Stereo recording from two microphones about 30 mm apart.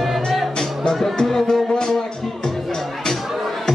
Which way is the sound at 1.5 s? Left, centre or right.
Left.